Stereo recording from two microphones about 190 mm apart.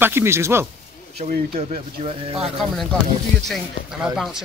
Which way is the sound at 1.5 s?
30° right (ahead or behind).